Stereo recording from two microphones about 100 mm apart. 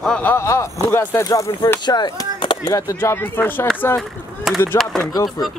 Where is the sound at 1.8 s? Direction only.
45° left (ahead or behind).